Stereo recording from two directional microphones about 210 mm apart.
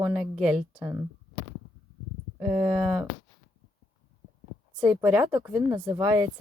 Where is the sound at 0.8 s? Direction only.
10° right (ahead or behind).